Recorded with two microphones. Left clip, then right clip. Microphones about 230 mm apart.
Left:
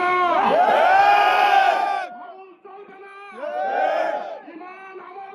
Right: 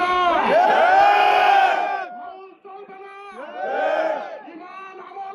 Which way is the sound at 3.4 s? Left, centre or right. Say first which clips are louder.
Left 3 dB; left.